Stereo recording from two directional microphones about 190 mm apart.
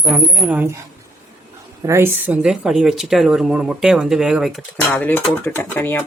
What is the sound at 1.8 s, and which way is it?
Speech, 15° right (ahead or behind).